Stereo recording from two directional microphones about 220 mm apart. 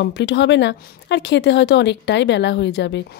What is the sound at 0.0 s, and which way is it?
Speech, 50° left (ahead or behind).